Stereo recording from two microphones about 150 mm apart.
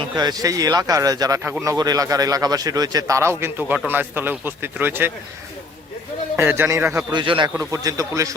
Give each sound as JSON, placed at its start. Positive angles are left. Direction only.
{"t": 0.2, "sound": "a man's voice", "side_deg": -25}
{"t": 6.3, "sound": "a man's voice", "side_deg": -15}
{"t": 7.1, "sound": "a man's voice", "side_deg": -30}
{"t": 7.5, "sound": "a man's voice", "side_deg": -20}